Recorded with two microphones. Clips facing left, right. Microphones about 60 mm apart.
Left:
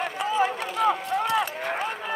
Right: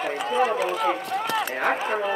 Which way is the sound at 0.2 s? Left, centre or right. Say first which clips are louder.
Even; centre.